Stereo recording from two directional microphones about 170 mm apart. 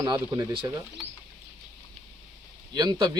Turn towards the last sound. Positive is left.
turn(degrees=-20)  # may be behind; listen again after turning